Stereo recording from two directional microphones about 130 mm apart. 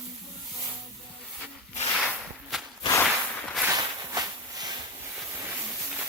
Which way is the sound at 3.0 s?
Centre (ahead or behind).